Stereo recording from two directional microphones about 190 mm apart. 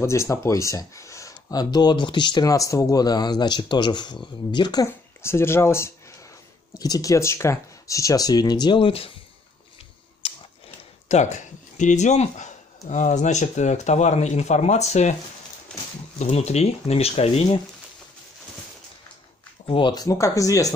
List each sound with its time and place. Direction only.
0.0 s speech: 15° left (ahead or behind)
10.2 s a sound: 30° left (ahead or behind)
11.1 s speech: 40° left (ahead or behind)
15.7 s a sound: 5° left (ahead or behind)
16.2 s speech: 35° left (ahead or behind)
19.6 s speech: 25° left (ahead or behind)